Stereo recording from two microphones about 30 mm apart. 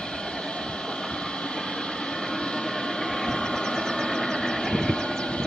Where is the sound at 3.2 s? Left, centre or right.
Centre.